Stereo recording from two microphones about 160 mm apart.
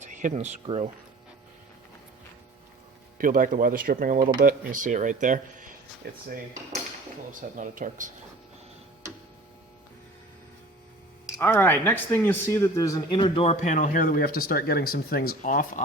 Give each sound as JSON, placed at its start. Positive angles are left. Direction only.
{"t": 0.0, "sound": "speech", "side_deg": -50}
{"t": 3.2, "sound": "speech", "side_deg": -60}
{"t": 7.5, "sound": "speech", "side_deg": -55}
{"t": 11.3, "sound": "speech", "side_deg": 15}
{"t": 13.1, "sound": "speech", "side_deg": 30}